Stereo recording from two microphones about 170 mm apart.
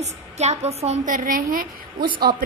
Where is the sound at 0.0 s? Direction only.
40° right (ahead or behind).